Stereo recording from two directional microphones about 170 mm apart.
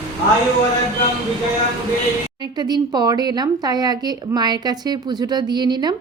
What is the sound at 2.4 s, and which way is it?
Speech, 25° right (ahead or behind).